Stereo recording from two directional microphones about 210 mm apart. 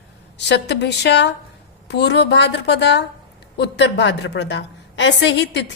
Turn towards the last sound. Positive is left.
turn(degrees=55)  # may be behind; listen again after turning